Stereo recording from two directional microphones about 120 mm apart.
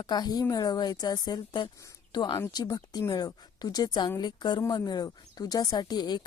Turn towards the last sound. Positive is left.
turn(degrees=35)  # may be behind; listen again after turning